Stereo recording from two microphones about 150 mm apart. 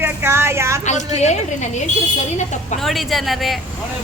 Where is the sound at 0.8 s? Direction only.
50° left (ahead or behind).